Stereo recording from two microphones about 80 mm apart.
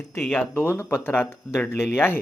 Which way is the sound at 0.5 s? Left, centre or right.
Left.